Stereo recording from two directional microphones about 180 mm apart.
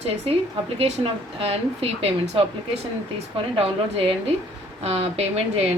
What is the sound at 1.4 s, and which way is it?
A woman's voice, 35° right (ahead or behind).